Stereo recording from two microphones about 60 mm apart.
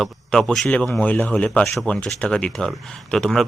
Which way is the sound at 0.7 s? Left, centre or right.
Centre.